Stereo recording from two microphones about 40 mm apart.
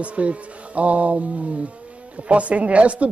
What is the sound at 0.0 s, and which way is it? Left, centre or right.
Speech, right.